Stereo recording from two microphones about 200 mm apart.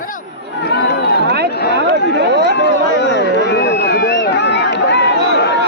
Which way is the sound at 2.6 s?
65° left (ahead or behind).